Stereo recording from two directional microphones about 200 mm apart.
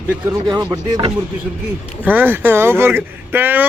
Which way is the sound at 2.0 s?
10° right (ahead or behind).